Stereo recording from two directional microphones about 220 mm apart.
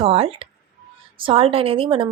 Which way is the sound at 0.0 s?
25° right (ahead or behind).